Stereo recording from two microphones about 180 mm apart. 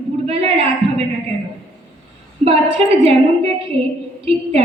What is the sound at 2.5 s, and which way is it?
A woman's voice, 35° right (ahead or behind).